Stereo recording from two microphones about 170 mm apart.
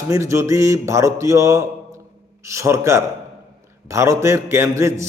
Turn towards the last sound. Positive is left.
turn(degrees=-15)  # may be behind; listen again after turning